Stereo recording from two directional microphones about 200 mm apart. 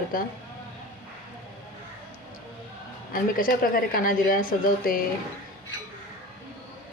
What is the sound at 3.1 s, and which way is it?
A woman's voice, 45° left (ahead or behind).